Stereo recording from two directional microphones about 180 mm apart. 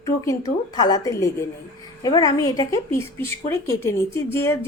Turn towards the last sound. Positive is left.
turn(degrees=15)  # may be behind; listen again after turning